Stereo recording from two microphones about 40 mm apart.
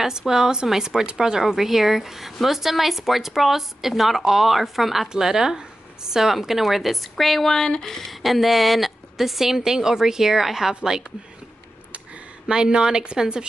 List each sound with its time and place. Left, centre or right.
0.0 s speech: centre
12.4 s a woman's voice: right